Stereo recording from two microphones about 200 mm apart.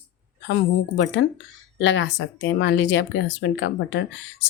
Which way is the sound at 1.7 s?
65° left (ahead or behind).